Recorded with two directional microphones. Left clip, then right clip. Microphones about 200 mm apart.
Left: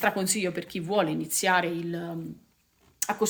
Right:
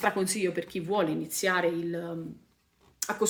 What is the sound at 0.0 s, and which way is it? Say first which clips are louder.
Speech: left 1 dB; 50° left (ahead or behind).